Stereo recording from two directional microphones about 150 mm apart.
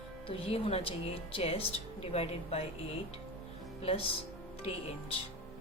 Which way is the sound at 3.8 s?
40° left (ahead or behind).